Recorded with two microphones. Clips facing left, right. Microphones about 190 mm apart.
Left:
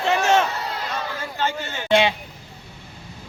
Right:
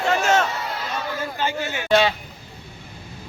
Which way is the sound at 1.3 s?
10° right (ahead or behind).